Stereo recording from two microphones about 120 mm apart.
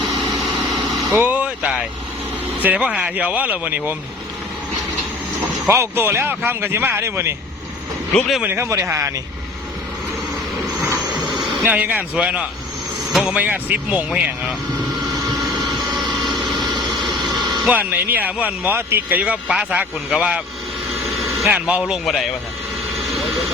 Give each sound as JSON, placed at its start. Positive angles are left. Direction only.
{"t": 0.3, "sound": "vehicle", "side_deg": 0}
{"t": 1.1, "sound": "vehicle", "side_deg": -15}
{"t": 2.6, "sound": "speech", "side_deg": -10}
{"t": 5.6, "sound": "speech", "side_deg": -20}
{"t": 8.4, "sound": "speech", "side_deg": -20}
{"t": 11.3, "sound": "vehicle", "side_deg": 0}
{"t": 11.6, "sound": "speech", "side_deg": -15}
{"t": 13.3, "sound": "speech", "side_deg": -15}
{"t": 14.8, "sound": "vehicle", "side_deg": 0}
{"t": 17.7, "sound": "speech", "side_deg": -15}
{"t": 21.5, "sound": "speech", "side_deg": -10}
{"t": 23.0, "sound": "vehicle", "side_deg": 0}